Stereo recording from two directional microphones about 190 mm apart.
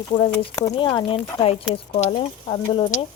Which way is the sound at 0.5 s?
20° left (ahead or behind).